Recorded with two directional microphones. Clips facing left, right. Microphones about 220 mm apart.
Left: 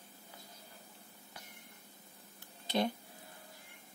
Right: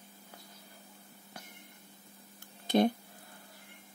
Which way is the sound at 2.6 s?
50° right (ahead or behind).